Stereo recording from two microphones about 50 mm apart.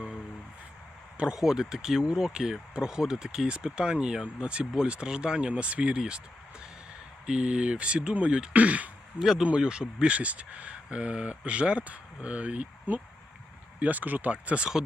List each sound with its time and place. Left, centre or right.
1.4 s speech: centre
7.3 s speech: centre
9.1 s speech: centre
13.7 s speech: right